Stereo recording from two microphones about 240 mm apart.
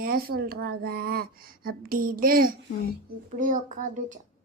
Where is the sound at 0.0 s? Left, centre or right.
Right.